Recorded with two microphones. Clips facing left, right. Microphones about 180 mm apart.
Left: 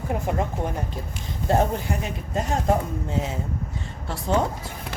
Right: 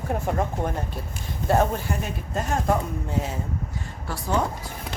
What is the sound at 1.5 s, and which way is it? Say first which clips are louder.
Speech: even; 20° left (ahead or behind).